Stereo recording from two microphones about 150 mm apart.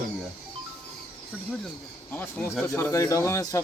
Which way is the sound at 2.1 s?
15° left (ahead or behind).